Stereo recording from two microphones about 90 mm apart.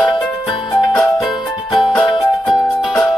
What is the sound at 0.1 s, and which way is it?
Music, 60° left (ahead or behind).